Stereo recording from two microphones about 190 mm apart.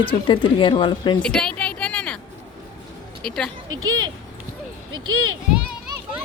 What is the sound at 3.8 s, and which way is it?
Speech, 90° right.